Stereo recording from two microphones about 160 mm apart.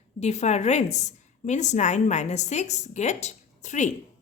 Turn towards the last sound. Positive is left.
turn(degrees=50)  # may be behind; listen again after turning